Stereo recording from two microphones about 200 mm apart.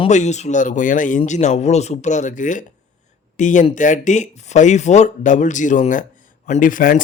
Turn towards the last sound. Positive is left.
turn(degrees=40)  # may be behind; listen again after turning